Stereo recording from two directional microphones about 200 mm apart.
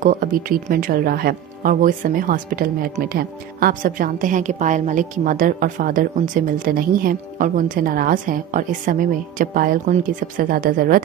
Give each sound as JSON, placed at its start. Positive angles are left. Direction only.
{"t": 0.0, "sound": "speech", "side_deg": -45}